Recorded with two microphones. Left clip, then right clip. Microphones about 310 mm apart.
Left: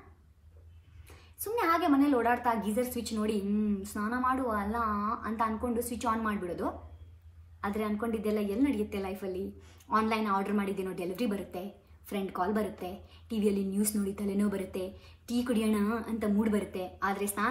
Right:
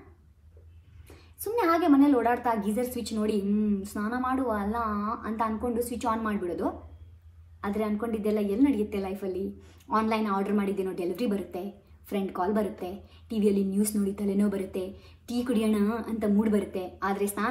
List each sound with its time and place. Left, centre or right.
1.4 s a woman's voice: centre